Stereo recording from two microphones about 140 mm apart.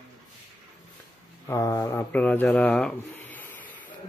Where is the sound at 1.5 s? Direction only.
20° left (ahead or behind).